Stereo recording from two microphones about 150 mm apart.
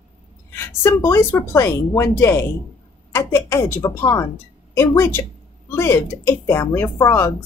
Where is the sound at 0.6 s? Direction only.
20° left (ahead or behind).